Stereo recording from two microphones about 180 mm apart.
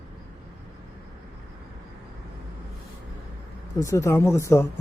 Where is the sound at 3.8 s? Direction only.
15° left (ahead or behind).